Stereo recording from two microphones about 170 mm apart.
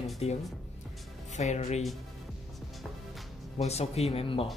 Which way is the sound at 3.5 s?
40° left (ahead or behind).